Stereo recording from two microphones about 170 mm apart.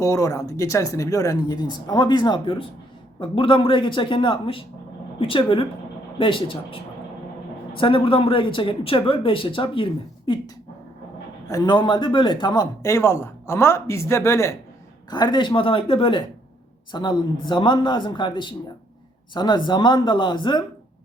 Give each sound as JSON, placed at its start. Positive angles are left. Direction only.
{"t": 0.0, "sound": "speech", "side_deg": 20}
{"t": 7.8, "sound": "speech", "side_deg": 30}
{"t": 11.4, "sound": "speech", "side_deg": 20}